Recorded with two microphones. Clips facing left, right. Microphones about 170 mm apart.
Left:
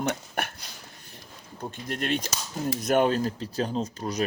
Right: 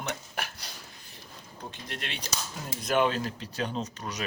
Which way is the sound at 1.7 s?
45° left (ahead or behind).